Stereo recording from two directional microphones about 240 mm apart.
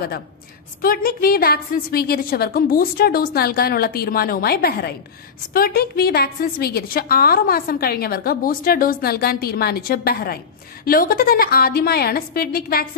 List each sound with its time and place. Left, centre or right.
0.8 s a woman's voice: left